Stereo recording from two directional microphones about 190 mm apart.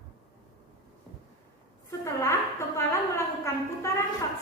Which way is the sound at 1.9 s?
15° left (ahead or behind).